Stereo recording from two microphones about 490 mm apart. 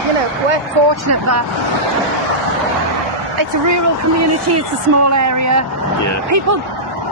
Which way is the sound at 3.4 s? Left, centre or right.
Right.